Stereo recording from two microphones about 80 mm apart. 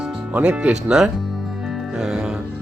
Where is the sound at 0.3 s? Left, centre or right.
Centre.